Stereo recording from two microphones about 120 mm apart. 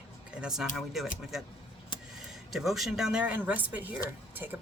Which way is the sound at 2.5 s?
Centre (ahead or behind).